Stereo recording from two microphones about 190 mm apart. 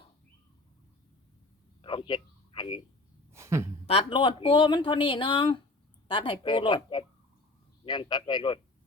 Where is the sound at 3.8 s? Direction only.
30° left (ahead or behind).